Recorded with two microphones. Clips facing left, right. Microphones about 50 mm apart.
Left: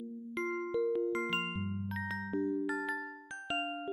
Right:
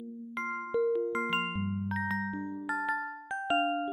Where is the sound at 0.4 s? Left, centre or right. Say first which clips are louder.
Right 3 dB; right.